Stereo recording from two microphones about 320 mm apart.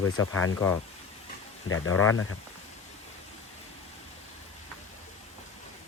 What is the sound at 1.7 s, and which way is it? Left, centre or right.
Speech, left.